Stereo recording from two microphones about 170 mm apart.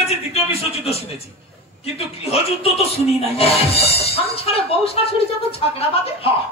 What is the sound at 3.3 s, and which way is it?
Speech, 35° left (ahead or behind).